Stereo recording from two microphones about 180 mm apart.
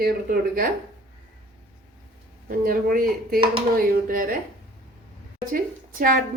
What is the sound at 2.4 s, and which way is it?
A woman's voice, 55° right (ahead or behind).